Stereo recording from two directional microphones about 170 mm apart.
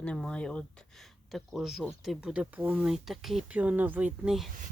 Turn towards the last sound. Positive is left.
turn(degrees=0)  # may be behind; listen again after turning